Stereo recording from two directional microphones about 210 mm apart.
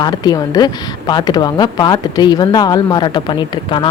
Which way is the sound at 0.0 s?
20° left (ahead or behind).